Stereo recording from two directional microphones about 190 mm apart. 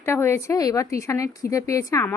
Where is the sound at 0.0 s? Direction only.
15° left (ahead or behind).